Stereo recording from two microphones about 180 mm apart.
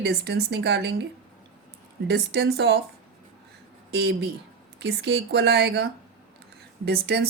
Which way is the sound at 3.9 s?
65° right (ahead or behind).